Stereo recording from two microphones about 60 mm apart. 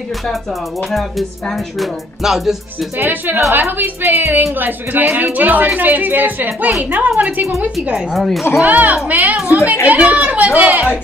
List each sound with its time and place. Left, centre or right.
0.3 s music: centre
3.0 s a child's voice: right
8.1 s music: centre
8.6 s a child's voice: right